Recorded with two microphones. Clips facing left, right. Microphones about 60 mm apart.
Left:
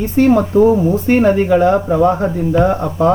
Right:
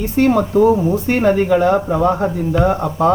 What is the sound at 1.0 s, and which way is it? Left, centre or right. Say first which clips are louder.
Speech: left 6 dB; left.